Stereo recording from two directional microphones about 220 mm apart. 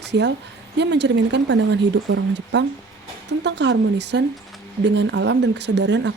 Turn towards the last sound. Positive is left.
turn(degrees=-55)  # may be behind; listen again after turning